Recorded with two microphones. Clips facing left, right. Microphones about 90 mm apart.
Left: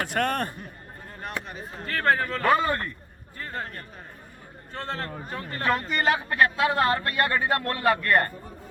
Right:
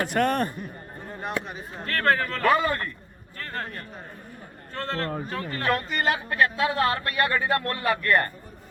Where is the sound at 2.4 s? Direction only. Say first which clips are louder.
Right 1 dB; 25° left (ahead or behind).